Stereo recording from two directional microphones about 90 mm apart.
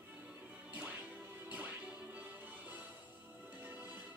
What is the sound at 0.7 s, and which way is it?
Music, 20° right (ahead or behind).